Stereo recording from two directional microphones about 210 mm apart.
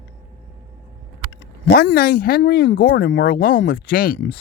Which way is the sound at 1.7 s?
55° left (ahead or behind).